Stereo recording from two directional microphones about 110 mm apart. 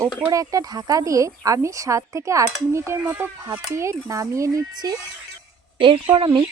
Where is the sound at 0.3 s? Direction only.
30° right (ahead or behind).